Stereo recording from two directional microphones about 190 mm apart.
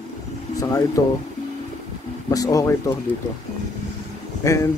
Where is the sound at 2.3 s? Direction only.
20° left (ahead or behind).